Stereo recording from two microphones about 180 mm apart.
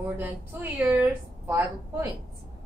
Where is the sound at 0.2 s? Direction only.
10° right (ahead or behind).